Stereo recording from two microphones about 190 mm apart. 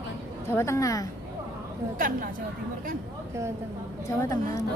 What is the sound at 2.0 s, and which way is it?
Speech, 45° right (ahead or behind).